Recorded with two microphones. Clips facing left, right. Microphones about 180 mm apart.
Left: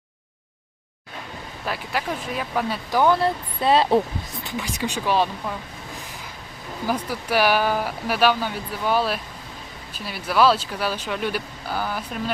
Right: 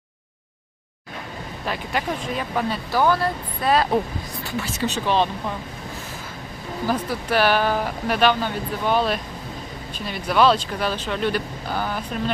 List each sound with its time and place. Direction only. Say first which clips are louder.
1.6 s speech: right 1 dB; 5° left (ahead or behind)
2.9 s speech: left 2 dB; 20° left (ahead or behind)
4.4 s speech: right 2 dB; 15° left (ahead or behind)
6.8 s speech: right 1 dB; 10° left (ahead or behind)